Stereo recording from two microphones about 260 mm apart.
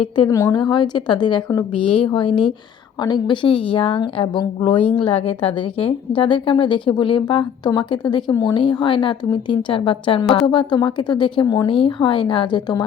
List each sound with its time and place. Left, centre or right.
0.2 s a woman's voice: centre